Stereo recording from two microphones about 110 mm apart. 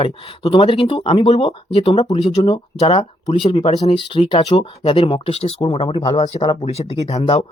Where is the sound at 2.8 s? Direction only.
70° left (ahead or behind).